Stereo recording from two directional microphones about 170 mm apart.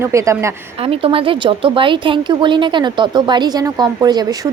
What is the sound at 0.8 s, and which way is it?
A woman's voice, 35° right (ahead or behind).